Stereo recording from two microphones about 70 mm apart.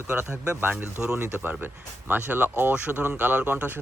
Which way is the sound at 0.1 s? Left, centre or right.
Right.